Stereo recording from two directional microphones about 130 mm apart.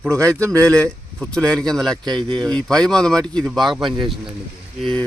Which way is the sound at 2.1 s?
40° right (ahead or behind).